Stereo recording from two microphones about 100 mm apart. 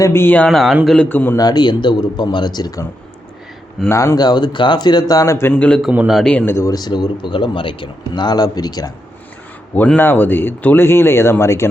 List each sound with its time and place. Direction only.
0.0 s speech: 25° left (ahead or behind)
0.4 s speech: centre (ahead or behind)
1.0 s speech: 20° left (ahead or behind)
1.4 s speech: 45° left (ahead or behind)
3.9 s speech: 30° left (ahead or behind)
4.2 s speech: 45° left (ahead or behind); by 5.5 s 30° left (ahead or behind)
5.5 s a man's voice: 10° left (ahead or behind)
6.1 s speech: centre (ahead or behind)
6.3 s speech: 25° left (ahead or behind)
6.7 s speech: 45° left (ahead or behind); by 7.9 s 60° left (ahead or behind)
8.1 s speech: 45° left (ahead or behind)
9.7 s speech: 15° left (ahead or behind)